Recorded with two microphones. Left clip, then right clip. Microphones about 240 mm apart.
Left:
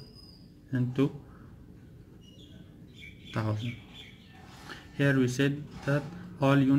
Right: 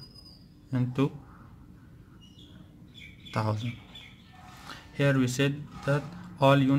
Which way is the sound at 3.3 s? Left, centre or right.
Right.